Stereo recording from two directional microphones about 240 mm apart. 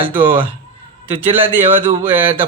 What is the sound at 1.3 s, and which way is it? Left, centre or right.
Speech, centre.